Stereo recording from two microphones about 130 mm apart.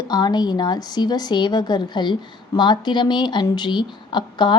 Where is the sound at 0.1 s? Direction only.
30° left (ahead or behind).